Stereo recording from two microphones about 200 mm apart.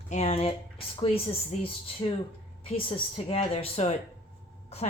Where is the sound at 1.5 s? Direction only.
35° left (ahead or behind).